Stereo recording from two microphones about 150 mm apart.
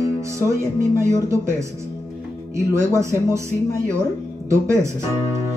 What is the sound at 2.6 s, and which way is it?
Music, 20° right (ahead or behind).